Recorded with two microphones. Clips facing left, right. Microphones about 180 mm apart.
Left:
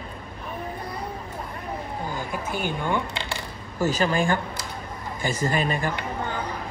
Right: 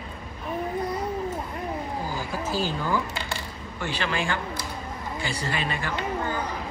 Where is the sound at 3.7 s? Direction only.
40° left (ahead or behind).